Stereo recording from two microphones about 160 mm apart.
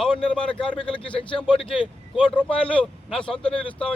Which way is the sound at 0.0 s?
5° left (ahead or behind).